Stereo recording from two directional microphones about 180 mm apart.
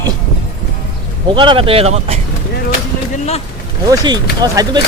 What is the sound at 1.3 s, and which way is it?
Speech, 30° right (ahead or behind).